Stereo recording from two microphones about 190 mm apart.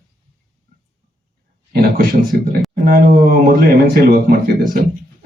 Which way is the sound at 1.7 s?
55° right (ahead or behind).